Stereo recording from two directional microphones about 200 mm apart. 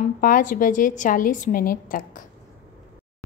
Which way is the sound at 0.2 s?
45° left (ahead or behind).